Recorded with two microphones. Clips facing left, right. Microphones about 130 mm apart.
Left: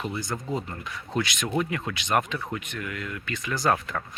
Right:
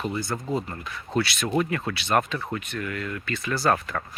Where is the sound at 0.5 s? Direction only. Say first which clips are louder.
Right 2 dB; 20° left (ahead or behind).